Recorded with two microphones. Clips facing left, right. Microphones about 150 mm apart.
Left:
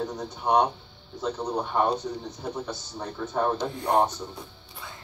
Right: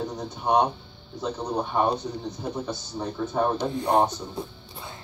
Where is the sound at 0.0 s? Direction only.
10° right (ahead or behind).